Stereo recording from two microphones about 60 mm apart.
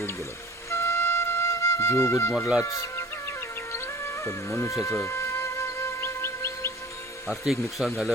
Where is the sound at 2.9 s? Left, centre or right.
Left.